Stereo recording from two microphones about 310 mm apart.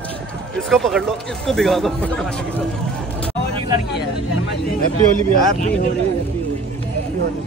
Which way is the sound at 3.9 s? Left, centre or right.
Left.